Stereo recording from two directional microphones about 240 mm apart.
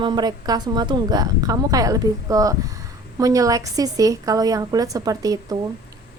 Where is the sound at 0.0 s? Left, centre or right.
Centre.